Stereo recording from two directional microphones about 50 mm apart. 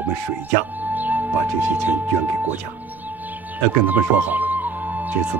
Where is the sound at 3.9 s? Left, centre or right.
Right.